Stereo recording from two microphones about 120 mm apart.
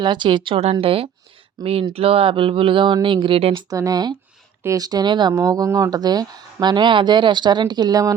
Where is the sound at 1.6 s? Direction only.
35° right (ahead or behind).